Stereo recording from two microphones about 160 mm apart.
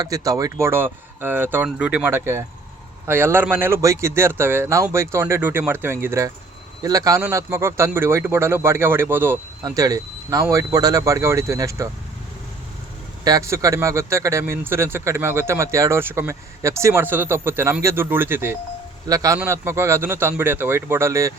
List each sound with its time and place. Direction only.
0.0 s speech: 20° right (ahead or behind)
13.2 s speech: 20° right (ahead or behind)